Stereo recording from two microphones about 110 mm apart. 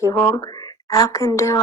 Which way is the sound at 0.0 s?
30° left (ahead or behind).